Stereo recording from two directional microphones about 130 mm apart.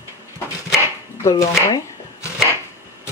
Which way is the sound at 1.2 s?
25° left (ahead or behind).